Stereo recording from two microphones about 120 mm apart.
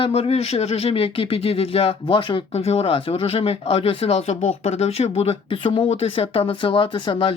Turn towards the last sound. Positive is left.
turn(degrees=45)  # may be behind; listen again after turning